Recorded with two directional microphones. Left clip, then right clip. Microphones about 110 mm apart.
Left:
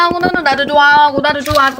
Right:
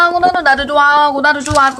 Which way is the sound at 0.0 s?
20° left (ahead or behind).